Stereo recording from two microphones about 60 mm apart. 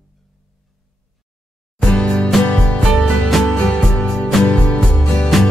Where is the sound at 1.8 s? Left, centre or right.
Centre.